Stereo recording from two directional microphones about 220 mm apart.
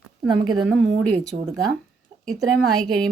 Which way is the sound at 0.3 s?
20° right (ahead or behind).